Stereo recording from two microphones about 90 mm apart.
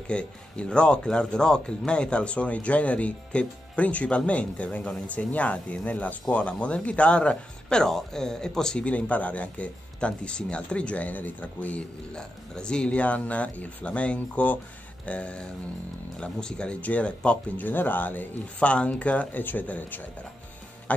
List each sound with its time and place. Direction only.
0.1 s speech: 10° left (ahead or behind)